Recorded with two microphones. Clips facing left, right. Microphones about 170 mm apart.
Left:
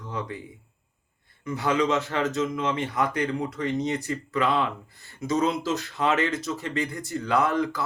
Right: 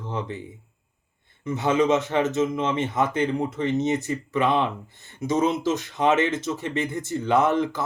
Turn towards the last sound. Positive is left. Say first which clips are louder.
# right 3 dB
turn(degrees=-20)  # may be behind; listen again after turning